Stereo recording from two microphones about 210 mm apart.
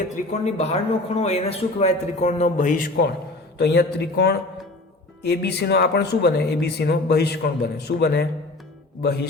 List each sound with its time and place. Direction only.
0.1 s a man's voice: 30° left (ahead or behind)
3.6 s speech: 50° left (ahead or behind)